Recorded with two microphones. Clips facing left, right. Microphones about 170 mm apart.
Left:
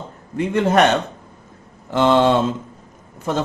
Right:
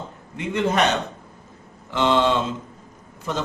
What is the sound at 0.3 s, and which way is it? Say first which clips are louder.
Speech: left 5 dB; 50° left (ahead or behind).